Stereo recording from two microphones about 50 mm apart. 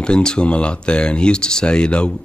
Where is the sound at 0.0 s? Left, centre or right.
Centre.